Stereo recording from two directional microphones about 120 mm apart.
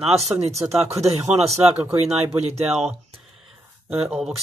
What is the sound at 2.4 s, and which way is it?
Speech, 60° right (ahead or behind).